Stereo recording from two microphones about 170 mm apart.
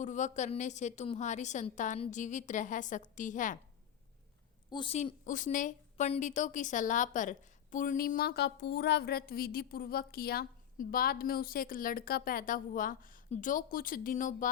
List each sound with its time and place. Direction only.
0.0 s a woman's voice: 45° left (ahead or behind)
4.7 s a woman's voice: 30° left (ahead or behind)
4.9 s a woman's voice: 45° left (ahead or behind)